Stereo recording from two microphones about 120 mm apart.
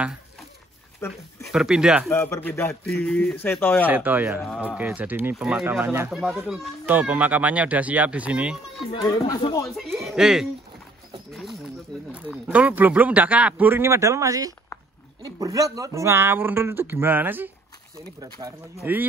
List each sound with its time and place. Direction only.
1.0 s a man's voice: 20° left (ahead or behind)
1.4 s speech: 5° right (ahead or behind)
2.0 s a man's voice: 20° left (ahead or behind)
2.8 s speech: 5° left (ahead or behind)
3.8 s a man's voice: 15° right (ahead or behind)
6.9 s a man's voice: 15° right (ahead or behind)
8.9 s speech: 30° left (ahead or behind)
9.8 s speech: centre (ahead or behind)
12.4 s a man's voice: 15° right (ahead or behind)
18.2 s speech: 30° right (ahead or behind)